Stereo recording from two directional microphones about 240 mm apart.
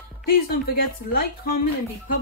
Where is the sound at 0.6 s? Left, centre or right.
Left.